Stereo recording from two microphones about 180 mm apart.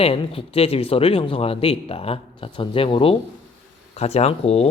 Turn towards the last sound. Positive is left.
turn(degrees=35)  # may be behind; listen again after turning